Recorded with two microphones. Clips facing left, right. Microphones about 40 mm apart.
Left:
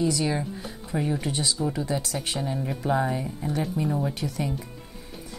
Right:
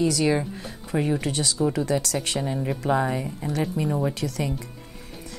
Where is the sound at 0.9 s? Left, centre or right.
Right.